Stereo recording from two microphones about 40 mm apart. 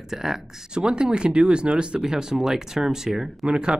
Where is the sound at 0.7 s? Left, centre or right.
Right; by 3.5 s centre.